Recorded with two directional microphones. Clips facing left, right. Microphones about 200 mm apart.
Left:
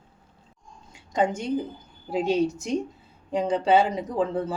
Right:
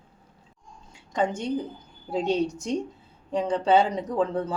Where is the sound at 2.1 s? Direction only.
10° left (ahead or behind).